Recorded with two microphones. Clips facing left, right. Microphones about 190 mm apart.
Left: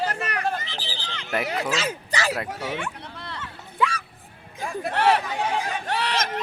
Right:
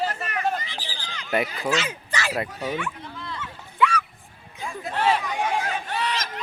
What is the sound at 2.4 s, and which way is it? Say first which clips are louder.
Speech: right 1 dB; 70° left (ahead or behind).